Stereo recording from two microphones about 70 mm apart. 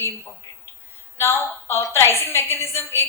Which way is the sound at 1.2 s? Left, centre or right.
Left.